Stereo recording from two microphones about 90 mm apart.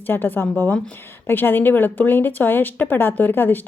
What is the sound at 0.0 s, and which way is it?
Speech, 20° left (ahead or behind).